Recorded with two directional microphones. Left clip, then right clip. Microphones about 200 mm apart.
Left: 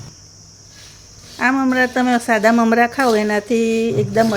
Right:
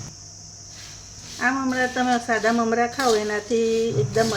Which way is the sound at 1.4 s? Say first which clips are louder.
Left 6 dB; 45° left (ahead or behind).